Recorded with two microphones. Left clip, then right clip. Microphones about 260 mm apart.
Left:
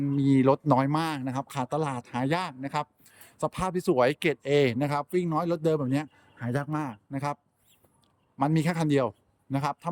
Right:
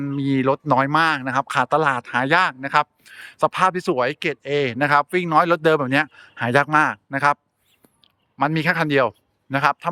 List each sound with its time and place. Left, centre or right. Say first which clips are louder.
0.0 s speech: right 3 dB; centre
6.5 s speech: right 15 dB; right
7.1 s speech: right 11 dB; centre
8.4 s a man's voice: right 8 dB; centre